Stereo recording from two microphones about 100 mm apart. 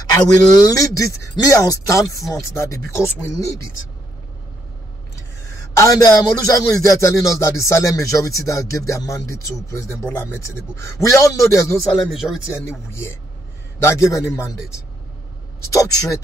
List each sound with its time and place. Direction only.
0.0 s speech: 40° left (ahead or behind)
5.8 s speech: 35° left (ahead or behind)
12.0 s speech: 5° right (ahead or behind)
12.6 s a man's voice: 25° left (ahead or behind)
15.7 s speech: 35° left (ahead or behind)